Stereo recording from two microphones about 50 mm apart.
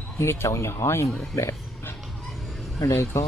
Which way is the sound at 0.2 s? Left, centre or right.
Left.